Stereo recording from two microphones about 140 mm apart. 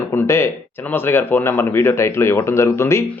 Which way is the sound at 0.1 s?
20° left (ahead or behind).